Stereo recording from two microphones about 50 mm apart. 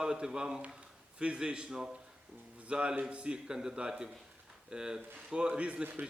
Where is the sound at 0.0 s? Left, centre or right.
Centre.